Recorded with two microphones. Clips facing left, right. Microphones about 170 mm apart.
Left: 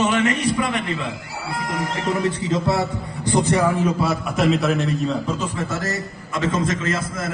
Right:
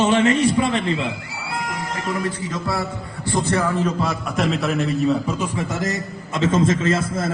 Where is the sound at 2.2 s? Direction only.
25° left (ahead or behind).